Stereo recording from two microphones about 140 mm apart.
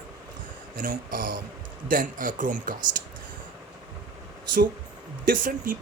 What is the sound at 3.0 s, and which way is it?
Speech, 90° right.